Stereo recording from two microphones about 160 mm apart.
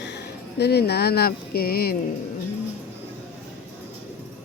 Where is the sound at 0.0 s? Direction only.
90° left; by 2.0 s 75° left (ahead or behind).